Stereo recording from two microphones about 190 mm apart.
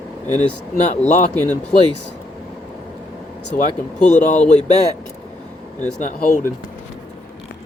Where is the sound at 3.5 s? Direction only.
45° left (ahead or behind).